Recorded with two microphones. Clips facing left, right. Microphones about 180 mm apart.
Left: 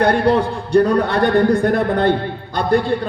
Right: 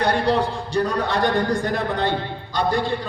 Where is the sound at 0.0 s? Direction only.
55° left (ahead or behind).